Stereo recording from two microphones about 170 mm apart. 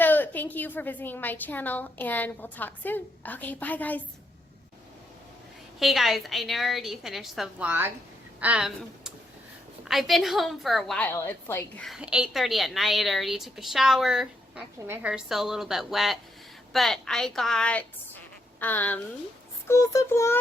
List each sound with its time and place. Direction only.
0.0 s a woman's voice: 10° left (ahead or behind)
5.8 s a woman's voice: centre (ahead or behind)
11.9 s a woman's voice: 5° right (ahead or behind); by 20.4 s 15° left (ahead or behind)